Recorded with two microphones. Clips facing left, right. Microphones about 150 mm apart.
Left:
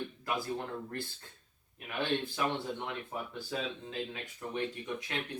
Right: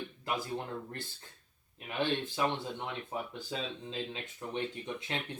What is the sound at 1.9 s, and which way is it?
Speech, 20° right (ahead or behind).